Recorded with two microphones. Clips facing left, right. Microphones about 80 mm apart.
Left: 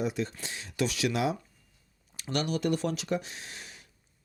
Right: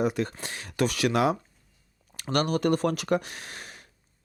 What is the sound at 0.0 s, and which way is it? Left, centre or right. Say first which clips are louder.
Speech: right 5 dB; right.